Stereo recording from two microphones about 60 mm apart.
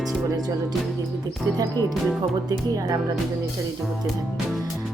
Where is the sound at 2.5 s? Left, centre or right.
Right.